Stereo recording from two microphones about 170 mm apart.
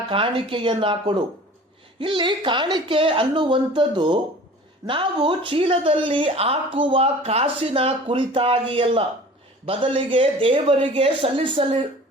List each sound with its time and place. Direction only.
0.1 s speech: 30° right (ahead or behind)